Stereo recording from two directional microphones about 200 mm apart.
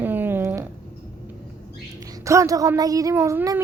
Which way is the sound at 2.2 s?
15° right (ahead or behind).